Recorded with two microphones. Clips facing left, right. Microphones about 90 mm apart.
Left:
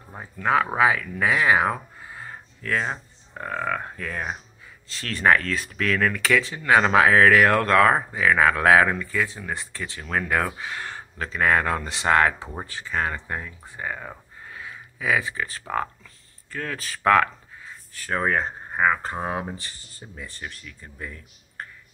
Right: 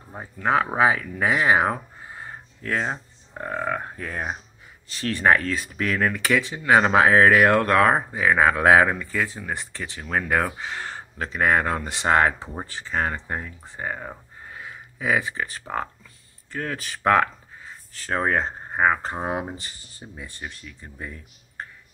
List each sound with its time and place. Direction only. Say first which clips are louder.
0.2 s speech: even; 25° right (ahead or behind)